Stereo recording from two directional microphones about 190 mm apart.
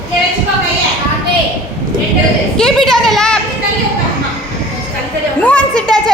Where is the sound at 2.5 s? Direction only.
Centre (ahead or behind).